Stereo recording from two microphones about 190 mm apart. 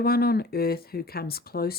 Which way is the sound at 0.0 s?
55° left (ahead or behind).